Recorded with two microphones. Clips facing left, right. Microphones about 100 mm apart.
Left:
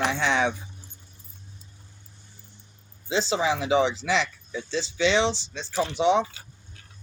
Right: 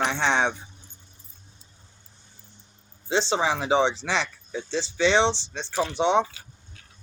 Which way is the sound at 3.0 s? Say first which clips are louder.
Right 1 dB; 30° right (ahead or behind).